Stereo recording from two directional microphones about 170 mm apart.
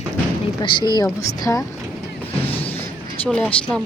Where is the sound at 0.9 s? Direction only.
20° left (ahead or behind).